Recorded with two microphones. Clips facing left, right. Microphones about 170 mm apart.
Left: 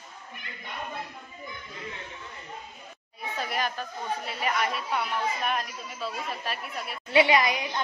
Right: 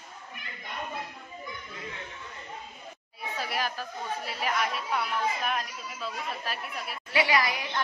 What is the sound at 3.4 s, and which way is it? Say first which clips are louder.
A woman's voice: left 2 dB; 5° right (ahead or behind).